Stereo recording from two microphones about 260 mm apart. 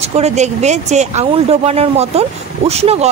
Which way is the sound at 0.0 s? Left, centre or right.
Right.